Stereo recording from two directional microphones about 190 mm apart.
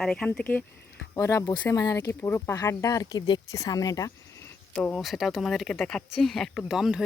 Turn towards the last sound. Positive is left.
turn(degrees=-5)  # may be behind; listen again after turning